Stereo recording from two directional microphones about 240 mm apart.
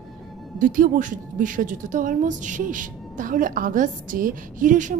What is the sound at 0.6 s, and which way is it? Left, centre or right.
A woman's voice, right.